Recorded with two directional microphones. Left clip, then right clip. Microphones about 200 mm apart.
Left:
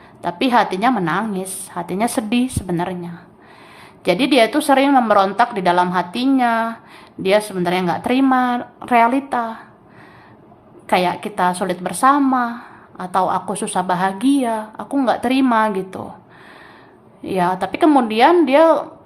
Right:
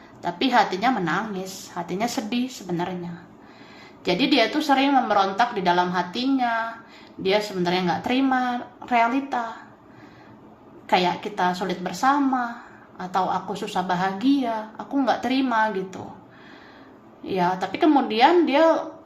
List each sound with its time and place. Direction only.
0.2 s a woman's voice: 25° left (ahead or behind)
10.8 s a woman's voice: 20° left (ahead or behind)
17.2 s a woman's voice: 25° left (ahead or behind)